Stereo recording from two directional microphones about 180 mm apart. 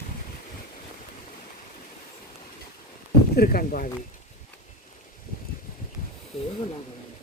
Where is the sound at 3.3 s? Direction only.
55° left (ahead or behind).